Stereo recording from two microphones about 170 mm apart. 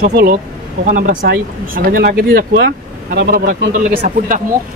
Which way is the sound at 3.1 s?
55° right (ahead or behind).